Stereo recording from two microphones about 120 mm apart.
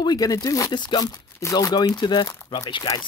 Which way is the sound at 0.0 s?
35° left (ahead or behind).